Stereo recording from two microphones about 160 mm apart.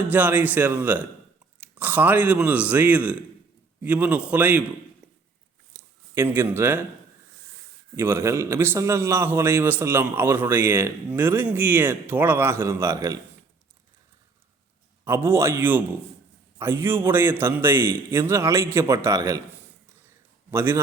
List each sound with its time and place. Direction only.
0.1 s a man's voice: 10° right (ahead or behind)
6.1 s a man's voice: 15° right (ahead or behind)
7.9 s a man's voice: 15° right (ahead or behind)
15.0 s a man's voice: 15° right (ahead or behind)